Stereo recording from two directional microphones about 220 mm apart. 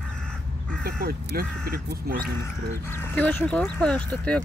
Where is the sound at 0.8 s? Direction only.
45° right (ahead or behind).